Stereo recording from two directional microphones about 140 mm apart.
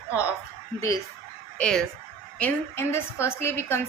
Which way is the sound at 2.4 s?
15° left (ahead or behind).